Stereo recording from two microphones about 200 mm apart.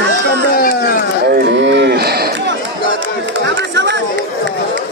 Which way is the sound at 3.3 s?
60° right (ahead or behind).